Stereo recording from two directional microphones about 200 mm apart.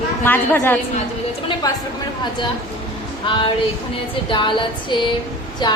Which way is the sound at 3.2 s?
25° left (ahead or behind).